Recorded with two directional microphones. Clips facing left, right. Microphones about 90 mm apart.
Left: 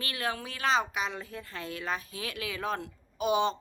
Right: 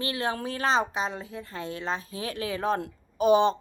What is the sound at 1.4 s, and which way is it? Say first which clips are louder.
Speech: right 4 dB; 30° right (ahead or behind).